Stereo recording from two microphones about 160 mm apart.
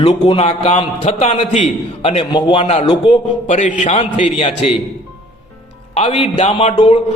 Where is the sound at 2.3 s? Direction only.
30° left (ahead or behind).